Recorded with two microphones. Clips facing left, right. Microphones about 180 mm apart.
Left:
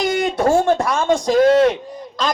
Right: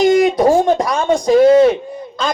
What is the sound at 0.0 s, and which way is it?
Speech, 15° right (ahead or behind).